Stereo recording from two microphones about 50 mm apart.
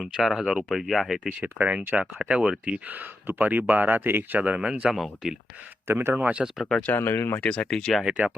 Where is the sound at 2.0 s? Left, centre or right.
Right.